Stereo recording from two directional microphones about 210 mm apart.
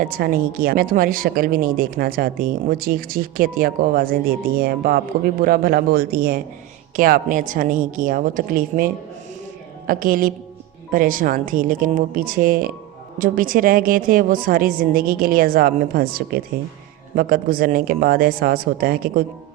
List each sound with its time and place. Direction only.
0.0 s speech: 40° right (ahead or behind)